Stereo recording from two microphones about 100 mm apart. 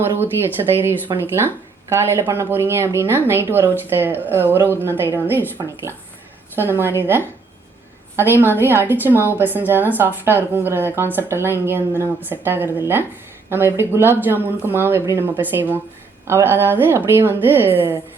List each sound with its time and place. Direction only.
0.6 s speech: 40° right (ahead or behind)
1.9 s a woman's voice: 25° right (ahead or behind)
6.6 s a woman's voice: 25° right (ahead or behind)